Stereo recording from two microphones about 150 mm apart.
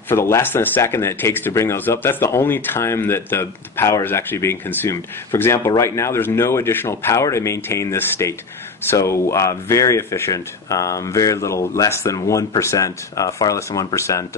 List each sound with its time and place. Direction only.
0.1 s speech: 15° left (ahead or behind)